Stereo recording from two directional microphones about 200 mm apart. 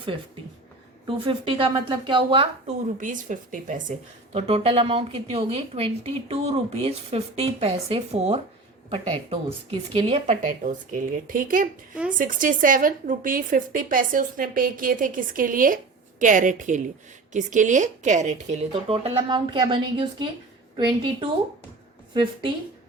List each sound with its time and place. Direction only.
1.0 s a woman's voice: 25° right (ahead or behind)
3.0 s a woman's voice: 40° right (ahead or behind); by 22.5 s 25° right (ahead or behind)